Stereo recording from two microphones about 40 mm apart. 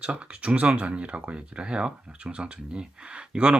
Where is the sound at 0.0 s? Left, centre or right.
Right.